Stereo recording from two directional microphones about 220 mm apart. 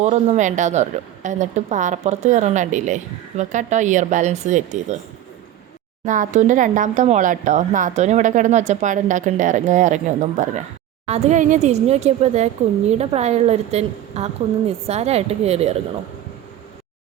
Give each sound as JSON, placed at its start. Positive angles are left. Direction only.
{"t": 0.0, "sound": "a woman's voice", "side_deg": -30}
{"t": 6.1, "sound": "a woman's voice", "side_deg": -35}